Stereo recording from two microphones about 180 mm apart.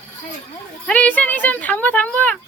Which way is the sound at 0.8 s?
10° left (ahead or behind).